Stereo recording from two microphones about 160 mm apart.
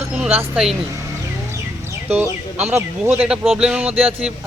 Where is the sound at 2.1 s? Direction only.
10° right (ahead or behind).